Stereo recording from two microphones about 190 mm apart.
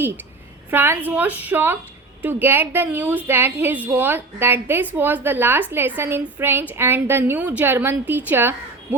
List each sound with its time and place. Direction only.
0.7 s a woman's voice: 10° right (ahead or behind)